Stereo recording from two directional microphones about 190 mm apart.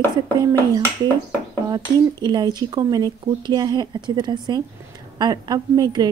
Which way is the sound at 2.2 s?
20° right (ahead or behind).